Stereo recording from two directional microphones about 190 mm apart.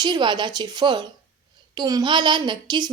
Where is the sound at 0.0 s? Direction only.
25° right (ahead or behind).